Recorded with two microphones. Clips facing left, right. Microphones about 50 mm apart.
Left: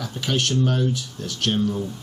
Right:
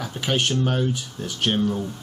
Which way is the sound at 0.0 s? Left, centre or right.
Centre.